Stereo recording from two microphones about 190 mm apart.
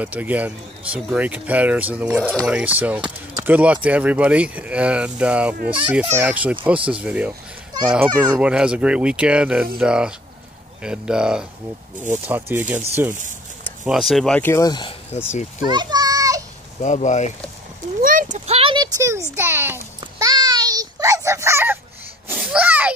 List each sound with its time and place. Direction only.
0.0 s speech: 10° right (ahead or behind)
13.8 s speech: centre (ahead or behind); by 15.0 s 25° left (ahead or behind)
15.6 s children playing: 20° right (ahead or behind)
16.8 s speech: 40° left (ahead or behind)
18.0 s a sound: 45° right (ahead or behind); by 19.8 s 10° right (ahead or behind)
20.0 s a sound: 20° right (ahead or behind)